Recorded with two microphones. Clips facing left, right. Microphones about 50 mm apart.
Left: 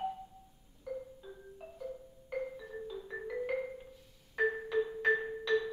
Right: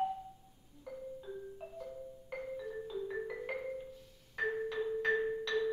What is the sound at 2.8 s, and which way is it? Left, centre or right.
Music, centre.